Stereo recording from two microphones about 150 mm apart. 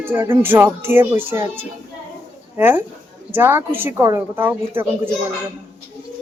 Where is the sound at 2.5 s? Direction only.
15° right (ahead or behind).